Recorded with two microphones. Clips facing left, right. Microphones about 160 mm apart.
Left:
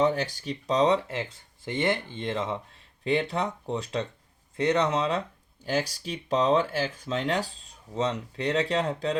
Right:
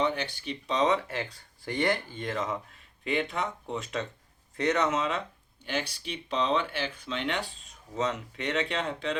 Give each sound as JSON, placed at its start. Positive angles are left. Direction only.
{"t": 0.0, "sound": "speech", "side_deg": 40}
{"t": 1.0, "sound": "speech", "side_deg": 20}